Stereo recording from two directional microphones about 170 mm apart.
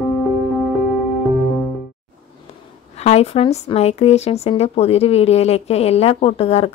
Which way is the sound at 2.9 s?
40° left (ahead or behind).